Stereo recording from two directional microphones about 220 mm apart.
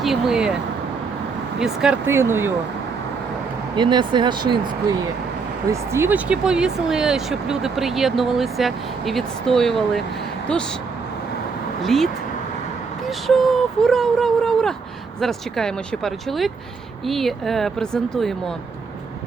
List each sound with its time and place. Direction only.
0.0 s speech: centre (ahead or behind)
1.5 s speech: 5° right (ahead or behind)
3.8 s speech: 20° right (ahead or behind); by 10.6 s 5° left (ahead or behind)
11.8 s speech: centre (ahead or behind)